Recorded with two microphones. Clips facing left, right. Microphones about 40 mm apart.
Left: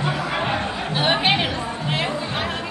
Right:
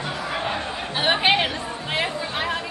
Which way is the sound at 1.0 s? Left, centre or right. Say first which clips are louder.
Even; centre.